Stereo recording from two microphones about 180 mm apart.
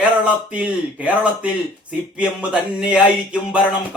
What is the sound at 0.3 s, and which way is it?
Speech, 5° right (ahead or behind).